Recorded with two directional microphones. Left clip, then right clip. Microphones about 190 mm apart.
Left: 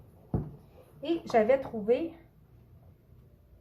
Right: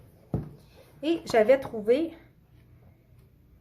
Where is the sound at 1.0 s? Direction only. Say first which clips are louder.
Right 4 dB; 40° right (ahead or behind).